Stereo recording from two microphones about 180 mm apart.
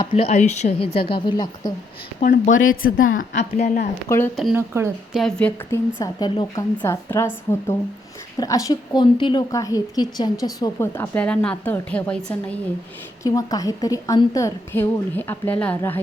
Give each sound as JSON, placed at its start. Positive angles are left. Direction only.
{"t": 0.0, "sound": "speech", "side_deg": 35}
{"t": 2.2, "sound": "speech", "side_deg": 45}
{"t": 4.1, "sound": "a woman's voice", "side_deg": 15}
{"t": 4.5, "sound": "speech", "side_deg": -15}
{"t": 5.1, "sound": "a woman's voice", "side_deg": 5}
{"t": 6.0, "sound": "a woman's voice", "side_deg": 25}
{"t": 13.2, "sound": "a woman's voice", "side_deg": 20}